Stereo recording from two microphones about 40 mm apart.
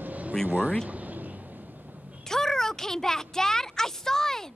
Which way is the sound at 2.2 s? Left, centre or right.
Centre.